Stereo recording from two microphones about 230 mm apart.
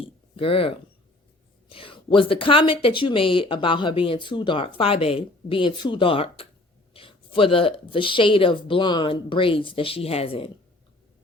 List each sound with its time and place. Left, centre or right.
0.3 s speech: left